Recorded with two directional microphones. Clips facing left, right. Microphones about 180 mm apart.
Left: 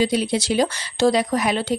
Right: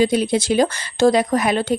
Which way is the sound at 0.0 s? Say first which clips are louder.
Right 3 dB; 50° right (ahead or behind).